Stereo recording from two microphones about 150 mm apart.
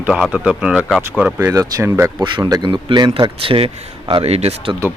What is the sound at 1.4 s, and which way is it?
Speech, 20° right (ahead or behind).